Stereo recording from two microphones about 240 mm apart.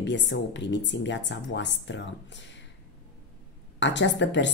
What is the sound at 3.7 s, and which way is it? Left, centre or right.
Speech, left.